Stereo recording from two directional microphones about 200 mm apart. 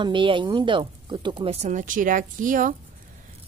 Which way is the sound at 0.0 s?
25° right (ahead or behind).